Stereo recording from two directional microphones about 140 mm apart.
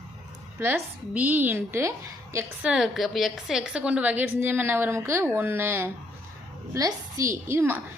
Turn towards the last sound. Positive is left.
turn(degrees=-15)  # may be behind; listen again after turning